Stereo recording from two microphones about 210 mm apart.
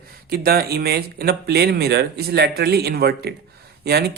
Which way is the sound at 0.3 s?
45° right (ahead or behind).